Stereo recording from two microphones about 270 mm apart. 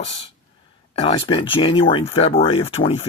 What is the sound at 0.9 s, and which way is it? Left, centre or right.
Speech, left.